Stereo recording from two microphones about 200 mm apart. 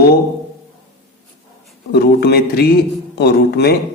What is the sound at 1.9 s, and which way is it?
A man's voice, 55° left (ahead or behind).